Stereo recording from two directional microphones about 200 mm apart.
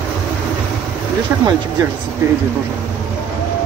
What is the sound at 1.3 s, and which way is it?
Speech, 10° right (ahead or behind).